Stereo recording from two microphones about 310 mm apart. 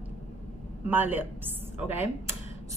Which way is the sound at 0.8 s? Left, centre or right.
Centre.